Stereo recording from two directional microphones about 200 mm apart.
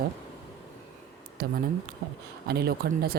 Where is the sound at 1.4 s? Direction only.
50° right (ahead or behind).